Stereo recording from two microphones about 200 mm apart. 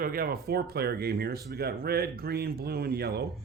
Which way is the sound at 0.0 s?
45° right (ahead or behind).